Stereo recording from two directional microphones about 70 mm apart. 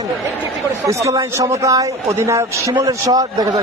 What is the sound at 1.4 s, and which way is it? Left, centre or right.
Speech, right.